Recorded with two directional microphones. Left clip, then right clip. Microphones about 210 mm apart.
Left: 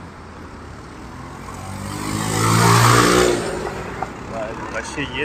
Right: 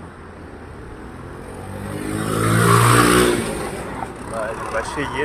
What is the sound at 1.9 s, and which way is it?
Vehicle, 40° left (ahead or behind).